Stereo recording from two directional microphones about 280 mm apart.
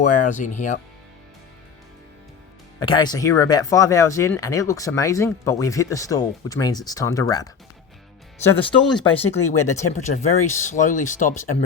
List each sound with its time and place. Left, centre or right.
0.0 s speech: left
2.8 s speech: centre
8.4 s speech: centre
9.5 s speech: left